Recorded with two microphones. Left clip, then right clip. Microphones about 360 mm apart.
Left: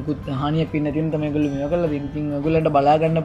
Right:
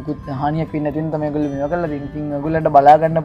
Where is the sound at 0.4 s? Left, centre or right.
Right.